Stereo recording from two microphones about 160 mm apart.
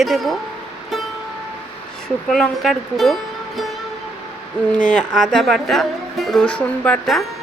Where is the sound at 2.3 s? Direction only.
Centre (ahead or behind).